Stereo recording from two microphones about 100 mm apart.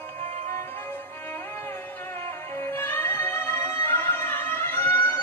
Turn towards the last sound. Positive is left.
turn(degrees=25)  # may be behind; listen again after turning